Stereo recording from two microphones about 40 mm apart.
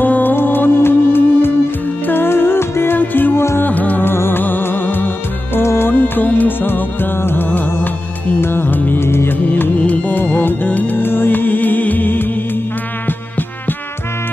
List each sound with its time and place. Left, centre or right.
0.0 s music: left
3.0 s music: left
4.0 s music: left
5.6 s music: left
6.6 s music: left
7.4 s music: left
8.4 s music: left
8.6 s music: left
9.0 s music of bollywood: left
9.8 s music: left
11.0 s music: left